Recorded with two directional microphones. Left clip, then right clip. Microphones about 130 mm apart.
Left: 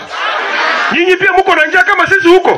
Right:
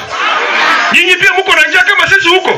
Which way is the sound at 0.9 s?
35° left (ahead or behind).